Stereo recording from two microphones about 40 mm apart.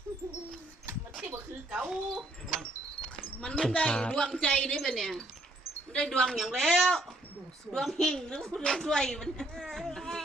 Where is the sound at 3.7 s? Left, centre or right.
Left.